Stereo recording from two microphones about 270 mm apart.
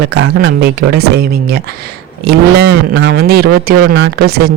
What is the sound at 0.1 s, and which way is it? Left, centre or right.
Speech, right.